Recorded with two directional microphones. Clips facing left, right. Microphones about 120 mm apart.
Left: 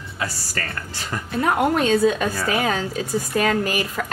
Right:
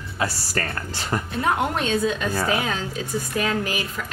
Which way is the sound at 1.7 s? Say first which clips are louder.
Left 5 dB; 40° left (ahead or behind).